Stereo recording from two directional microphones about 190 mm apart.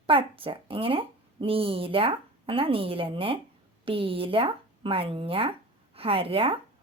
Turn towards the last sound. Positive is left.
turn(degrees=-30)  # may be behind; listen again after turning